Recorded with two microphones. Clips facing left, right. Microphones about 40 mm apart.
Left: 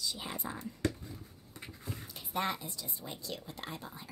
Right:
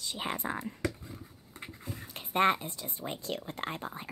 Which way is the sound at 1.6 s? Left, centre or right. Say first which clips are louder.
Right 1 dB; right.